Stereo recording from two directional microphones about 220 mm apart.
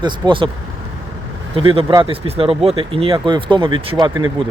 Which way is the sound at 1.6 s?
25° right (ahead or behind).